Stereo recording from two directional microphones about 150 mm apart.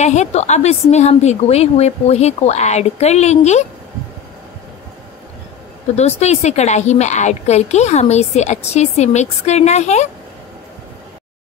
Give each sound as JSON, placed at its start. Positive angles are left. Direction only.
{"t": 0.0, "sound": "a woman's voice", "side_deg": 50}
{"t": 5.9, "sound": "a woman's voice", "side_deg": 45}